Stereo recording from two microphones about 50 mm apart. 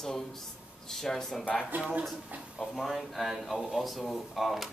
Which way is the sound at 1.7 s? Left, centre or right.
Right.